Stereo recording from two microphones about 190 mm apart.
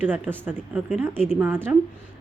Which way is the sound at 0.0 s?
10° right (ahead or behind).